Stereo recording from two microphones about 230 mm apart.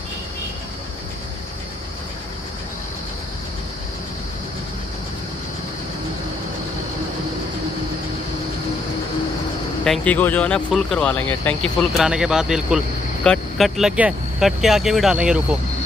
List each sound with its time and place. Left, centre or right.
9.8 s speech: centre